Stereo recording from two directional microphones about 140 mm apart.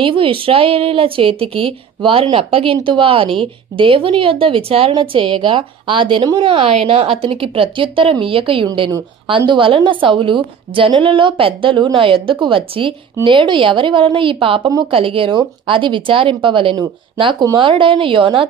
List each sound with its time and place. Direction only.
0.0 s speech: 40° right (ahead or behind)